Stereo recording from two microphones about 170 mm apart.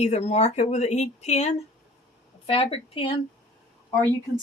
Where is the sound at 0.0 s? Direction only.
40° left (ahead or behind).